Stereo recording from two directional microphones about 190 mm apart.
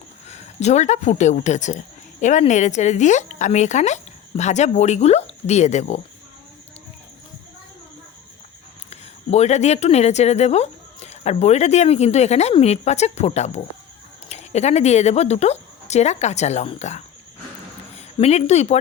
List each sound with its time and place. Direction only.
0.3 s speech: 35° left (ahead or behind)
8.9 s speech: 35° left (ahead or behind)